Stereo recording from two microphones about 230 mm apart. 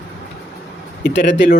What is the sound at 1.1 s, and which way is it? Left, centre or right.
Speech, left.